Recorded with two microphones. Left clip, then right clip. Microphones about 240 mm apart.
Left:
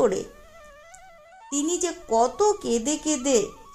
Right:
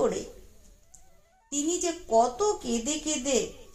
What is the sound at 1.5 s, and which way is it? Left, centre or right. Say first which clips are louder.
Speech: left 3 dB; left.